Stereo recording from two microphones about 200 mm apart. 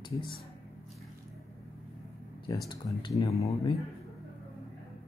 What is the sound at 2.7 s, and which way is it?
Speech, 25° left (ahead or behind).